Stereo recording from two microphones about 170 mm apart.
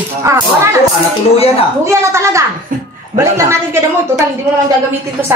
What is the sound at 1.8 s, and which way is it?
A woman's voice, 15° right (ahead or behind).